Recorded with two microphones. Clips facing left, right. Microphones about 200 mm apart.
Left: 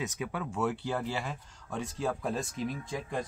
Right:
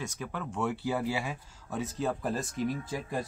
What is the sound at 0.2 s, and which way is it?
Speech, 5° left (ahead or behind).